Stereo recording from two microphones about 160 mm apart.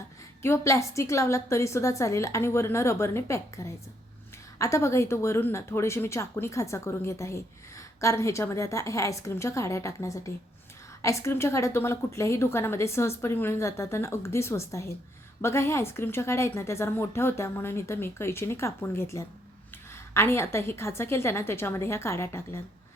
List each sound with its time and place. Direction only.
0.4 s a woman's voice: 15° left (ahead or behind)